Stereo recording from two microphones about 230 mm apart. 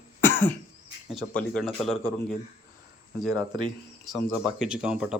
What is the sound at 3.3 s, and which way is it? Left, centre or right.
Speech, right.